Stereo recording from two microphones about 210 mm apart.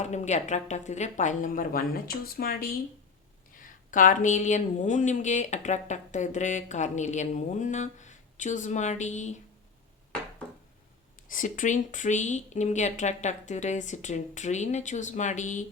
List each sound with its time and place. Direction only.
0.0 s speech: 35° left (ahead or behind)
11.3 s speech: 40° left (ahead or behind)